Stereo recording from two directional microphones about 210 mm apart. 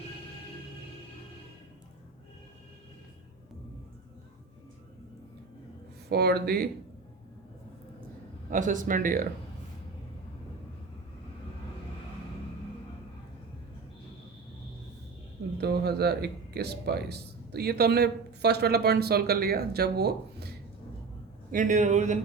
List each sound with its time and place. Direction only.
6.1 s speech: 50° right (ahead or behind)
8.4 s speech: 40° right (ahead or behind)
15.5 s speech: 50° right (ahead or behind)
21.5 s speech: 35° right (ahead or behind)